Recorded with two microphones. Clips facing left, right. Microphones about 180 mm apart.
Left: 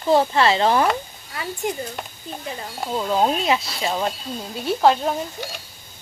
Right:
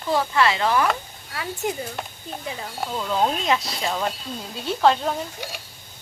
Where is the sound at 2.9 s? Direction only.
20° left (ahead or behind).